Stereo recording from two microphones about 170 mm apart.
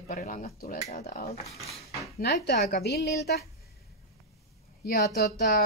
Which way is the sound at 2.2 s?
70° left (ahead or behind).